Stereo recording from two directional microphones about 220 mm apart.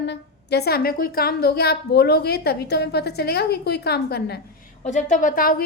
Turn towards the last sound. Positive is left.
turn(degrees=35)  # may be behind; listen again after turning